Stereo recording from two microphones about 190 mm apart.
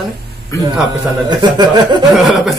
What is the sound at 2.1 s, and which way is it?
Speech, centre (ahead or behind).